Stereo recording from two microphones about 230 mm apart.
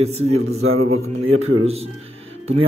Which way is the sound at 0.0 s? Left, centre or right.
Right.